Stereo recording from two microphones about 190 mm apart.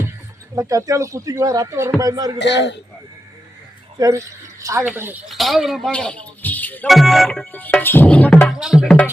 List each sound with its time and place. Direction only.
0.5 s speech: 15° right (ahead or behind)
2.4 s speech: 65° left (ahead or behind)
3.9 s speech: 20° right (ahead or behind); by 6.1 s 5° left (ahead or behind)
6.4 s music: 10° left (ahead or behind)